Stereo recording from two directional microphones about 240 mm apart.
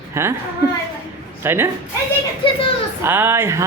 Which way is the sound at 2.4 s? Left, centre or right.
Left.